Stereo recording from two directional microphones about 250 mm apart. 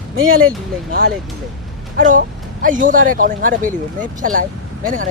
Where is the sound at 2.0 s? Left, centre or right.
Right.